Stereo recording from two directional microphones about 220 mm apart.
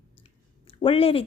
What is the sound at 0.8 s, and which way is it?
Speech, 25° left (ahead or behind).